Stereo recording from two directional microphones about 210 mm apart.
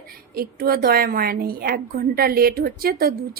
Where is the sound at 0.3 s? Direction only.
45° right (ahead or behind).